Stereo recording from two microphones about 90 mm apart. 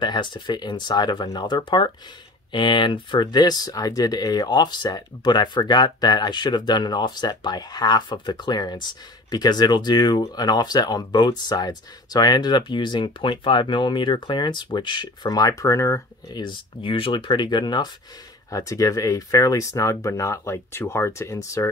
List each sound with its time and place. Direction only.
0.0 s speech: 60° left (ahead or behind)
15.3 s speech: 40° left (ahead or behind)
16.3 s speech: 65° left (ahead or behind)
18.5 s speech: 40° left (ahead or behind)